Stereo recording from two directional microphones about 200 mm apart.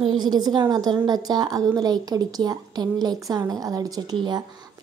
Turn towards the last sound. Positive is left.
turn(degrees=-20)  # may be behind; listen again after turning